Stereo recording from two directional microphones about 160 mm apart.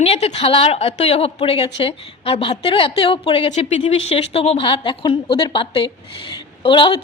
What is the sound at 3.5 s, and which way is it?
A woman's voice, 45° left (ahead or behind).